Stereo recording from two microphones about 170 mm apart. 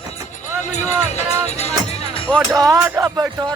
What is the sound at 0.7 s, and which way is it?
Speech, 45° left (ahead or behind).